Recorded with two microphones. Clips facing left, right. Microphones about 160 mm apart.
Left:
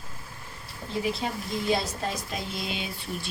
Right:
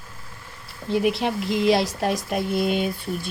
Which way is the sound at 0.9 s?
75° right (ahead or behind).